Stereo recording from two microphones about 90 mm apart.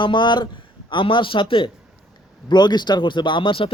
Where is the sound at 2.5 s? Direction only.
55° left (ahead or behind); by 3.7 s 70° left (ahead or behind).